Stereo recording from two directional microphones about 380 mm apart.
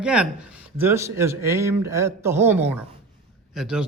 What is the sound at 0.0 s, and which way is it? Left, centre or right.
A man's voice, centre.